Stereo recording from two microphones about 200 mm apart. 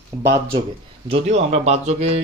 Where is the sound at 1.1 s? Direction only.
30° right (ahead or behind).